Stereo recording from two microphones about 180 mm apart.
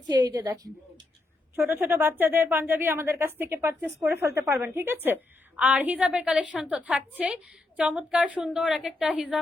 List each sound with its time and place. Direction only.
0.1 s a woman's voice: 20° right (ahead or behind); by 9.4 s 5° right (ahead or behind)